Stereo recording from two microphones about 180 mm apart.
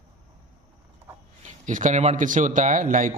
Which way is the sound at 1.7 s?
45° right (ahead or behind).